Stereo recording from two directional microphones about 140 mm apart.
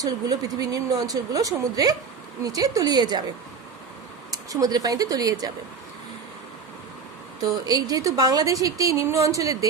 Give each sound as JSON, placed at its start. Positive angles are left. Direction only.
{"t": 0.0, "sound": "a woman's voice", "side_deg": -25}
{"t": 4.6, "sound": "a woman's voice", "side_deg": -25}
{"t": 7.4, "sound": "a woman's voice", "side_deg": -25}